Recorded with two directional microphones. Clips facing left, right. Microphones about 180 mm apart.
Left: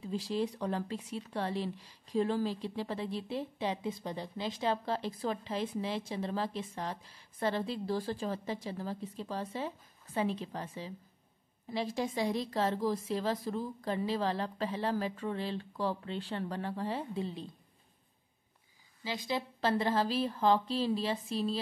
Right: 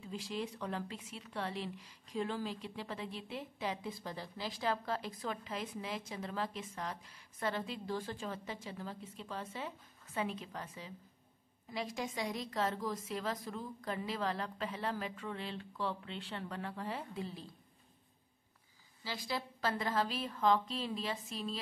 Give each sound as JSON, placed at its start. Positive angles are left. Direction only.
{"t": 0.0, "sound": "speech", "side_deg": 35}
{"t": 19.0, "sound": "speech", "side_deg": 20}